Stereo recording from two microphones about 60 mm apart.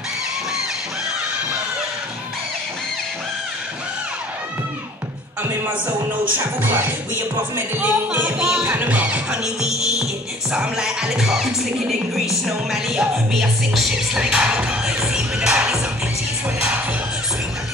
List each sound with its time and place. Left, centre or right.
6.3 s music: right
7.9 s speech: right
8.6 s speech: right; by 9.9 s centre
10.5 s music: centre